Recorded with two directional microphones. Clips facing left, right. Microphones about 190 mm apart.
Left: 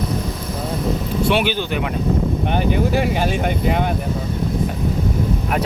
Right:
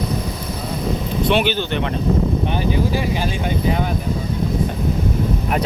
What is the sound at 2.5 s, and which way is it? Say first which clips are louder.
Speech: left 2 dB; 55° left (ahead or behind).